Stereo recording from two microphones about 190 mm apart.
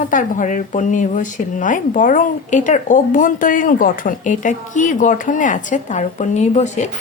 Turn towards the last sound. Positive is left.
turn(degrees=35)  # may be behind; listen again after turning